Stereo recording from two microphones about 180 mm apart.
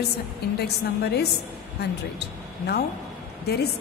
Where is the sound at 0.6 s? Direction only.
65° left (ahead or behind).